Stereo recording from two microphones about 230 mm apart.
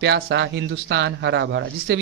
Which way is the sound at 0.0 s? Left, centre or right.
Right.